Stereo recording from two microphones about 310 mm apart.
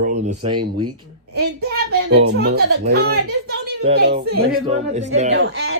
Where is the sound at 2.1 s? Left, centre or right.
Right.